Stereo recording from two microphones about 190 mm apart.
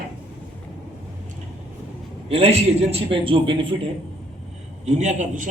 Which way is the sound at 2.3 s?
30° right (ahead or behind).